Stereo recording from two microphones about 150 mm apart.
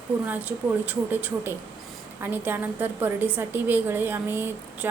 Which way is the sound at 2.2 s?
15° right (ahead or behind).